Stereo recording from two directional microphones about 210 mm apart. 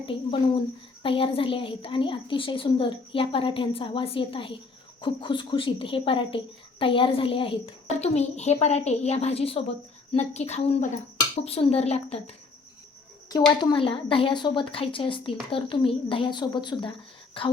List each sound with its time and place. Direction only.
0.0 s a woman's voice: 25° left (ahead or behind)
13.3 s a woman's voice: 20° left (ahead or behind)